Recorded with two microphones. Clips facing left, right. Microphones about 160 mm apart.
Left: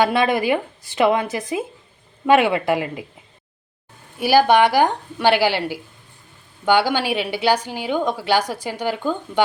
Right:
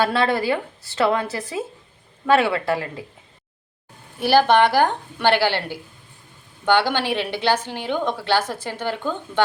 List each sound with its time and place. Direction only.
0.0 s a woman's voice: 15° left (ahead or behind)
4.2 s a woman's voice: 10° left (ahead or behind)